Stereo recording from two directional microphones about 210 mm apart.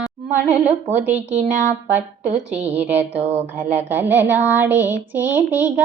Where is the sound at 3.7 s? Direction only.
10° right (ahead or behind).